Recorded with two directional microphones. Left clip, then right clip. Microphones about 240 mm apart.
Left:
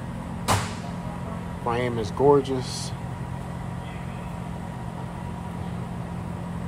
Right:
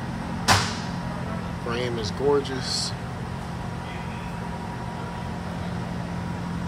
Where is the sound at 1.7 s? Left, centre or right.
Left.